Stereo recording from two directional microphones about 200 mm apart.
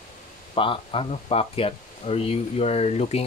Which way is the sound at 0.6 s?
25° left (ahead or behind).